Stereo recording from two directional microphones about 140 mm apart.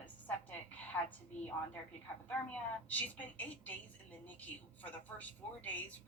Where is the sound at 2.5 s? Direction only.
10° left (ahead or behind).